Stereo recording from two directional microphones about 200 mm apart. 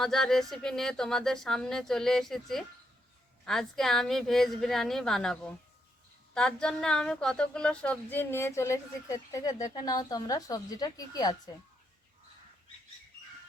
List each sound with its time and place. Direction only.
0.0 s a woman's voice: centre (ahead or behind); by 11.5 s 20° left (ahead or behind)